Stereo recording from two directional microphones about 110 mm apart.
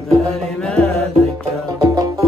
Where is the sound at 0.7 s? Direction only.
10° left (ahead or behind).